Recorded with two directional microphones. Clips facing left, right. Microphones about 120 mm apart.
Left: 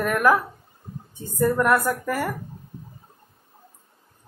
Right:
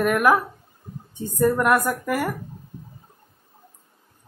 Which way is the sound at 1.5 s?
15° right (ahead or behind).